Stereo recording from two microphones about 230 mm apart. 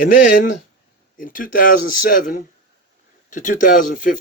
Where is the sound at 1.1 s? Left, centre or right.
Left.